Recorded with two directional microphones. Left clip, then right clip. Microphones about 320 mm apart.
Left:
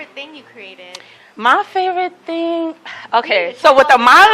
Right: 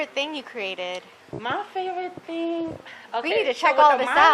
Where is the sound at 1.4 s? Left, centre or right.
Left.